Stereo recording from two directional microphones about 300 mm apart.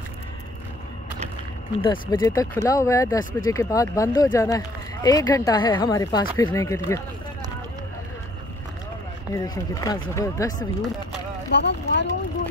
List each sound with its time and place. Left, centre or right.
1.8 s speech: centre
9.3 s speech: centre
11.5 s speech: left